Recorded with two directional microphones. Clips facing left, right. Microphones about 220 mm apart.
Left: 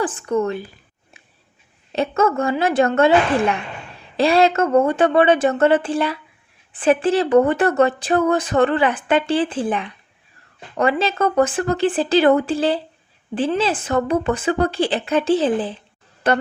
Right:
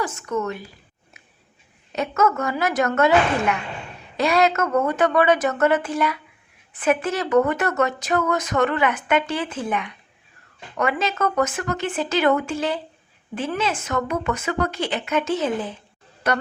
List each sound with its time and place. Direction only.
0.0 s speech: 30° left (ahead or behind)
1.2 s a sound: 30° left (ahead or behind)
1.9 s a woman's voice: 30° left (ahead or behind)